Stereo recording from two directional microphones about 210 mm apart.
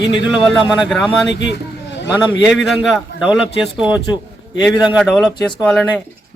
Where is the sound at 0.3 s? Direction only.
Centre (ahead or behind).